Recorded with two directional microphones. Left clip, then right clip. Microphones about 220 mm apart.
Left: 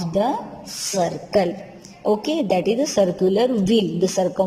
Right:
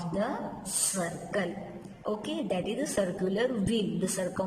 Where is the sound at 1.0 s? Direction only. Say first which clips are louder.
Left 12 dB; 20° left (ahead or behind).